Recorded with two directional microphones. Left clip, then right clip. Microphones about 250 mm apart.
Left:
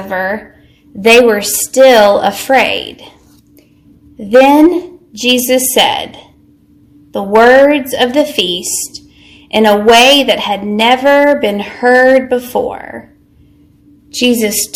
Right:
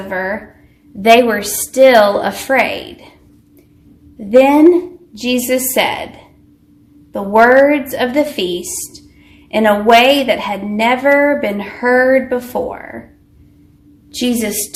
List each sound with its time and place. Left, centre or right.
0.1 s a woman's voice: left
4.3 s a woman's voice: left
7.1 s a woman's voice: left
14.1 s a woman's voice: left